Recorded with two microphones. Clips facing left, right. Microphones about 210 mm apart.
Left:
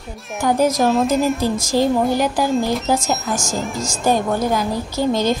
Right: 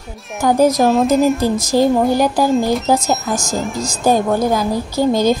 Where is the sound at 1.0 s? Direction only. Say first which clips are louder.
Right 4 dB; centre (ahead or behind).